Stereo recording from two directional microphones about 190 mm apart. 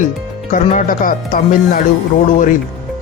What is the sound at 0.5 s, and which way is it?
Speech, 40° left (ahead or behind).